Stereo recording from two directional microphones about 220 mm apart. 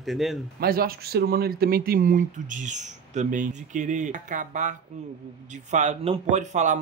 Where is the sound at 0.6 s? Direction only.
45° right (ahead or behind).